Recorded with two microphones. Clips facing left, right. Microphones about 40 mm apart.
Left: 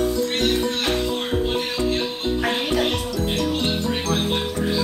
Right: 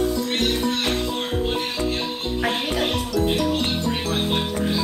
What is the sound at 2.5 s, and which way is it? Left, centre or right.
Music, centre.